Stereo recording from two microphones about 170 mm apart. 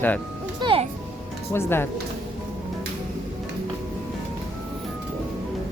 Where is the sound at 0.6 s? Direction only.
30° right (ahead or behind).